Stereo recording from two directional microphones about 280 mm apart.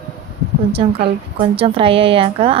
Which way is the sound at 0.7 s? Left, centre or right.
Centre.